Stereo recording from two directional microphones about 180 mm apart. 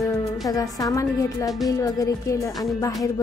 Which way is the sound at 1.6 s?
20° left (ahead or behind).